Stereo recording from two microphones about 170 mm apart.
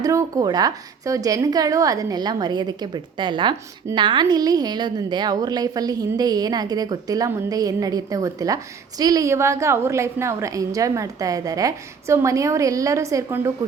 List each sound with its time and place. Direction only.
0.0 s a woman's voice: 20° right (ahead or behind)